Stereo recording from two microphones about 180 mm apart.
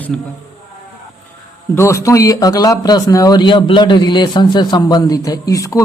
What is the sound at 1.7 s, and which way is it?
A man's voice, 15° left (ahead or behind).